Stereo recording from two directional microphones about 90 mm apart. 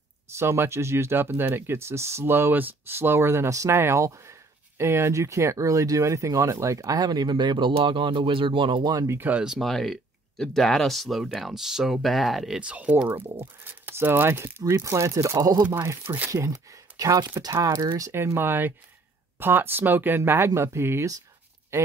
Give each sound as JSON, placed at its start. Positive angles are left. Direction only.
{"t": 0.4, "sound": "speech", "side_deg": -30}
{"t": 8.9, "sound": "speech", "side_deg": -35}
{"t": 9.4, "sound": "speech", "side_deg": 0}
{"t": 12.5, "sound": "speech", "side_deg": -15}
{"t": 13.7, "sound": "speech", "side_deg": -25}
{"t": 18.1, "sound": "speech", "side_deg": -30}